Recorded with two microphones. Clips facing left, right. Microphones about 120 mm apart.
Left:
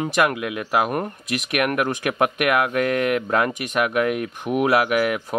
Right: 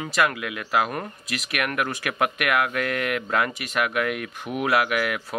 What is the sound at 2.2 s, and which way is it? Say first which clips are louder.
Speech: left 3 dB; 35° left (ahead or behind).